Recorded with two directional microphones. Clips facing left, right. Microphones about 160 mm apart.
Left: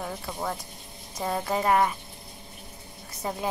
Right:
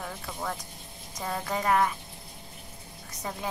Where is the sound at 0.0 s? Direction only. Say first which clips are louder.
Left 3 dB; 20° left (ahead or behind).